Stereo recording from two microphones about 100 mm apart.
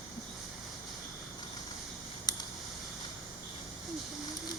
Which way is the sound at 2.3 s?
45° left (ahead or behind).